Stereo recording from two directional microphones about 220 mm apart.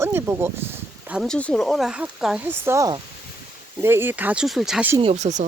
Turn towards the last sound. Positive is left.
turn(degrees=-30)  # may be behind; listen again after turning